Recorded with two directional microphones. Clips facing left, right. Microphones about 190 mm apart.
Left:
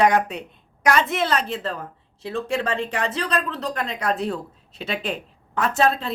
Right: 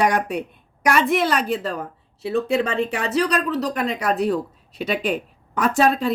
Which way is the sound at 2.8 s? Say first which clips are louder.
Right 5 dB; 5° right (ahead or behind).